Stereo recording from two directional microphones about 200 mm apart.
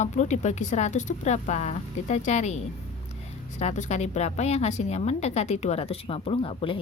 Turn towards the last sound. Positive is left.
turn(degrees=25)  # may be behind; listen again after turning